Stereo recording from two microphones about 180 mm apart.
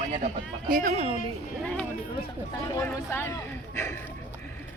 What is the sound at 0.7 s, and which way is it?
Speech, 50° right (ahead or behind).